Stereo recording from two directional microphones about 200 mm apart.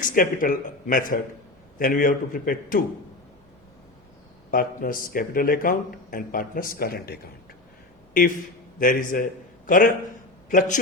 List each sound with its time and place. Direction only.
0.0 s speech: 45° left (ahead or behind)
4.5 s speech: 45° left (ahead or behind)
8.8 s a man's voice: 45° left (ahead or behind)